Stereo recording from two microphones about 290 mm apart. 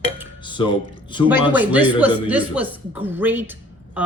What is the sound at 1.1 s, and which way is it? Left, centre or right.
Speech, centre.